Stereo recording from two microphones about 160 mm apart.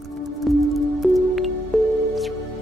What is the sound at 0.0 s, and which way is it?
Music, centre (ahead or behind).